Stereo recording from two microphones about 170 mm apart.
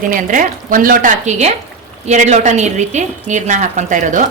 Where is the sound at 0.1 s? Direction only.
50° right (ahead or behind).